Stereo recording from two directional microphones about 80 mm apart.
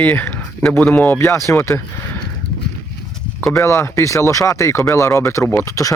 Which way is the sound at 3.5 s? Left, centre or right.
Left.